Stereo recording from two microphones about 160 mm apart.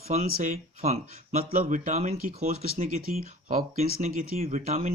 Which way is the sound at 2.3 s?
40° right (ahead or behind).